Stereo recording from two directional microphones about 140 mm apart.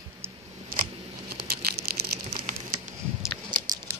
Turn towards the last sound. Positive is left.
turn(degrees=-30)  # may be behind; listen again after turning